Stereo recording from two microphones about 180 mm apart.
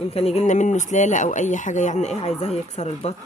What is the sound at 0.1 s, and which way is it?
Speech, 35° left (ahead or behind).